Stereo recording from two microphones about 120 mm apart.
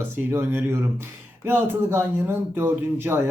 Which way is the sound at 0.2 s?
20° right (ahead or behind).